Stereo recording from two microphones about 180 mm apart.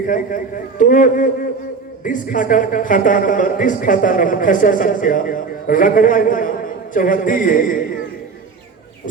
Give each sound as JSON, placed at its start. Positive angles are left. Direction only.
{"t": 0.1, "sound": "speech", "side_deg": 50}